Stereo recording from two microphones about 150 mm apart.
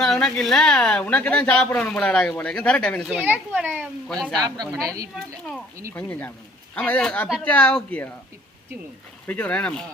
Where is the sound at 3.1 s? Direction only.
10° right (ahead or behind).